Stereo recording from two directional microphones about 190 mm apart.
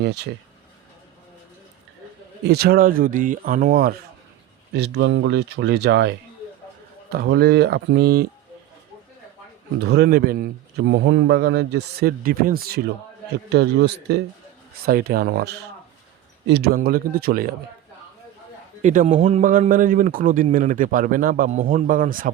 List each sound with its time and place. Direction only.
0.0 s speech: 60° right (ahead or behind)
2.5 s a man's voice: 55° right (ahead or behind)
4.7 s speech: 65° right (ahead or behind)
9.8 s a man's voice: 60° right (ahead or behind)
18.8 s a man's voice: 40° right (ahead or behind)